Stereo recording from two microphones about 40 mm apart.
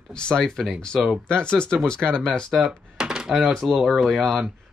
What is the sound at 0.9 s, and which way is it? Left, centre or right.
Speech, centre.